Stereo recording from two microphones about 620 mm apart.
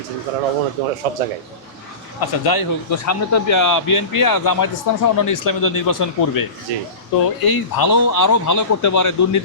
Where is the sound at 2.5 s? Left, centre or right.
Left.